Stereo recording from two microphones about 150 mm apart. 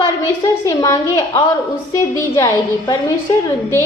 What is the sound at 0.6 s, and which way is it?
Speech, 20° left (ahead or behind).